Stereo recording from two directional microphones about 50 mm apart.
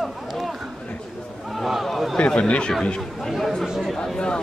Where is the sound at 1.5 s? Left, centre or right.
Centre.